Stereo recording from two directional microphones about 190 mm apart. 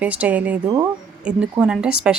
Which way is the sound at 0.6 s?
20° right (ahead or behind).